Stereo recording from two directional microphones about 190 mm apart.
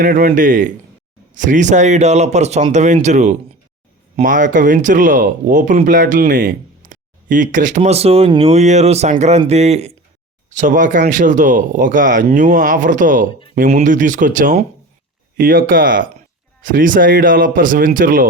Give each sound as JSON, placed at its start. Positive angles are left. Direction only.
{"t": 0.0, "sound": "speech", "side_deg": -50}